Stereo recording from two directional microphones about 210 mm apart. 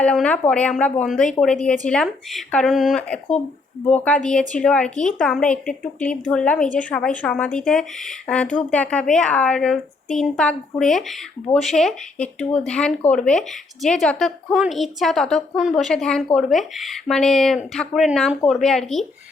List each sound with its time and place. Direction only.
0.0 s a woman's voice: 5° left (ahead or behind)